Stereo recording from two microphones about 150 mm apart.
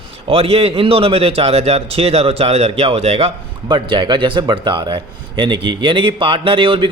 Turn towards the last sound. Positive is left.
turn(degrees=-35)  # may be behind; listen again after turning